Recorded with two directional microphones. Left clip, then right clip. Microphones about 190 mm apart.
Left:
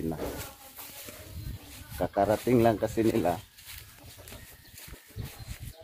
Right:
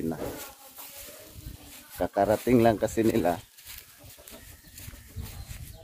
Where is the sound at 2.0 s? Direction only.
20° right (ahead or behind).